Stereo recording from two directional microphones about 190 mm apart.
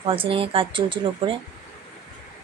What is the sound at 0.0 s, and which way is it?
Speech, 30° right (ahead or behind).